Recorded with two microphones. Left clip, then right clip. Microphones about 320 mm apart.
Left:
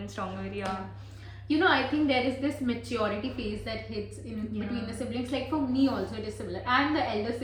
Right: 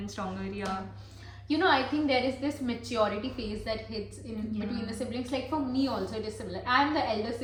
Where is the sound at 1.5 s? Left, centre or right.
Centre.